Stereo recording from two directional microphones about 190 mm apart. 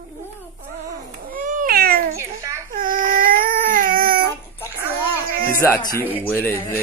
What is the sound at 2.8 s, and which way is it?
Baby cry, 45° right (ahead or behind).